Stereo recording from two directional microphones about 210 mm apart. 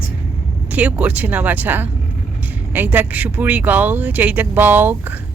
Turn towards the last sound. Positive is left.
turn(degrees=-10)  # may be behind; listen again after turning